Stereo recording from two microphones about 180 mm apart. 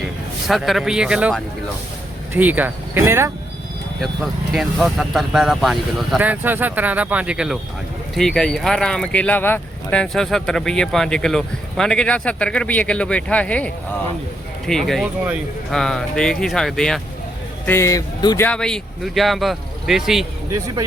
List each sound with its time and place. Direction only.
0.4 s speech: centre (ahead or behind)
4.0 s speech: centre (ahead or behind)
14.7 s speech: centre (ahead or behind)
17.7 s a man's voice: 15° left (ahead or behind)
18.4 s speech: 5° left (ahead or behind)
20.5 s speech: 20° right (ahead or behind)